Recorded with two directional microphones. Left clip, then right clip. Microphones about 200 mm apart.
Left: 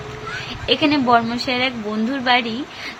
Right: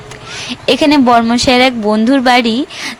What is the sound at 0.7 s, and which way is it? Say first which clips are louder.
A woman's voice: right 7 dB; 55° right (ahead or behind).